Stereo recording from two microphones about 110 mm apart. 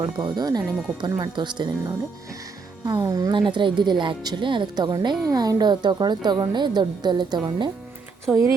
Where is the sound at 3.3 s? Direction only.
45° right (ahead or behind).